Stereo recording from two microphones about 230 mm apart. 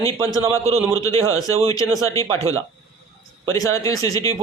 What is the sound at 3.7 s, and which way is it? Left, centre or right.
Speech, centre.